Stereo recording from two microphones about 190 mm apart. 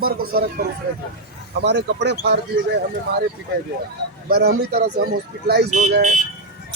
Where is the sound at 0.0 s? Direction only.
55° right (ahead or behind).